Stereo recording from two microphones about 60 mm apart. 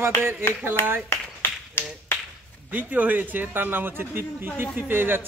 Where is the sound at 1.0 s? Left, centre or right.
Left.